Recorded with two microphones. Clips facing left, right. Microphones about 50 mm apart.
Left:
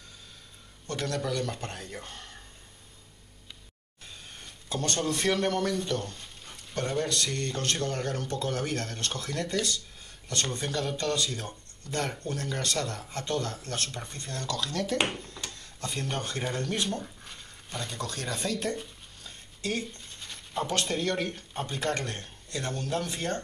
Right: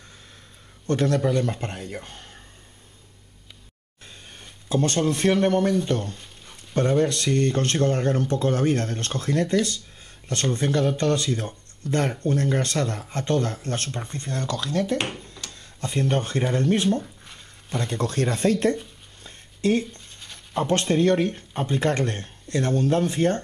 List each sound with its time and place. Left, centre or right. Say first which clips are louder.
0.8 s a man's voice: right 9 dB; right
4.6 s a man's voice: right 8 dB; right
14.4 s a man's voice: right 5 dB; right
15.0 s speech: even; centre
15.8 s speech: right 9 dB; right
17.0 s a sound: right 1 dB; centre
17.7 s speech: right 10 dB; right
19.2 s a sound: right 11 dB; right
20.5 s speech: right 8 dB; right